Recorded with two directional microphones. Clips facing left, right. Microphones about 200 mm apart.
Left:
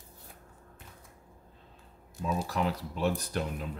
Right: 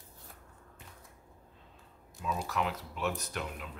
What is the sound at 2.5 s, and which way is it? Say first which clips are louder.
Speech: left 3 dB; 35° left (ahead or behind).